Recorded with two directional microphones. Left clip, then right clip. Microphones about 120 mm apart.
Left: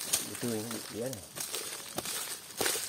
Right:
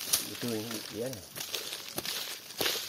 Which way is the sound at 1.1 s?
35° left (ahead or behind).